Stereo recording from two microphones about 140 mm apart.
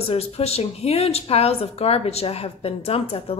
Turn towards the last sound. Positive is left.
turn(degrees=45)  # may be behind; listen again after turning